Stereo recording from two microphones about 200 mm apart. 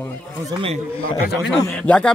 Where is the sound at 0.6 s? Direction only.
35° right (ahead or behind).